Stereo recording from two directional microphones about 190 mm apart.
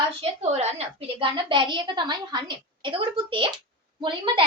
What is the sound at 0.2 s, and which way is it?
A woman's voice, 35° right (ahead or behind).